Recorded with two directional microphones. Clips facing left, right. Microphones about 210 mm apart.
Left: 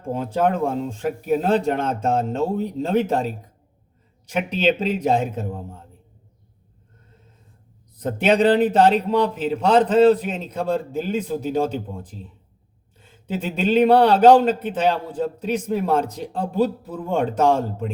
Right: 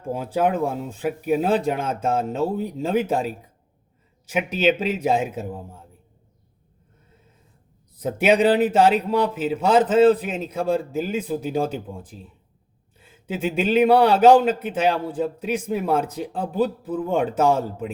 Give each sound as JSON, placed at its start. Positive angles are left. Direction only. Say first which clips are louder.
{"t": 0.1, "sound": "a man's voice", "louder": "left 1 dB", "side_deg": -5}
{"t": 7.9, "sound": "a man's voice", "louder": "even", "side_deg": -10}